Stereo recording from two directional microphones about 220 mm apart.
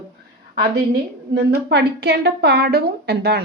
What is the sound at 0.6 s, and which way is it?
A woman's voice, 50° right (ahead or behind).